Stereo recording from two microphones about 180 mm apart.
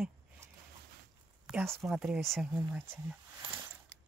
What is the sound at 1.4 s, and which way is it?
Speech, 5° right (ahead or behind).